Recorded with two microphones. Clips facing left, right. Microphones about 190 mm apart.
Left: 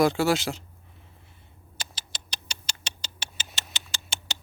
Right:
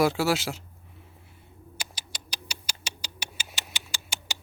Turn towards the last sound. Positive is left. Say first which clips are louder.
# even
turn(degrees=-10)  # may be behind; listen again after turning